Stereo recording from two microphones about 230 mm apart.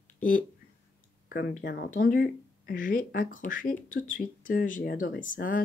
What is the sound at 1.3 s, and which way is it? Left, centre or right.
Speech, left.